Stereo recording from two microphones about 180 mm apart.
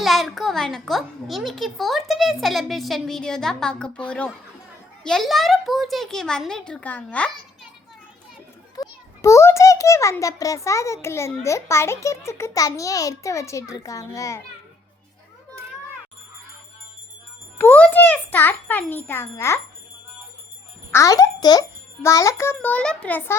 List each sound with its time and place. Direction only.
0.0 s a child's voice: centre (ahead or behind)
8.7 s a child's voice: 20° left (ahead or behind)
17.6 s a child's voice: 10° left (ahead or behind)
20.9 s a child's voice: 15° left (ahead or behind)
22.5 s a child's voice: 5° left (ahead or behind)